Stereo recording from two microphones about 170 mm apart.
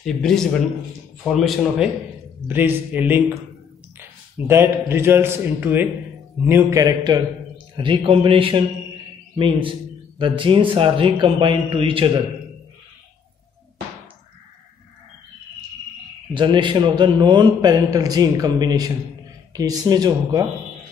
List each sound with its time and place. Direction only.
0.0 s speech: 5° left (ahead or behind)
2.4 s a man's voice: 10° right (ahead or behind)
4.5 s a man's voice: 15° right (ahead or behind); by 12.1 s 30° right (ahead or behind)
16.3 s a man's voice: 25° right (ahead or behind)